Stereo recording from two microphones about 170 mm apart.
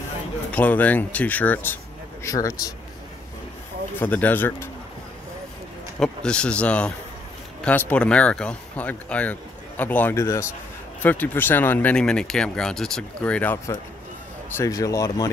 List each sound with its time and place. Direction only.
0.5 s speech: 10° left (ahead or behind)
4.0 s speech: 10° left (ahead or behind)
5.9 s speech: 5° left (ahead or behind)
14.6 s speech: 20° left (ahead or behind)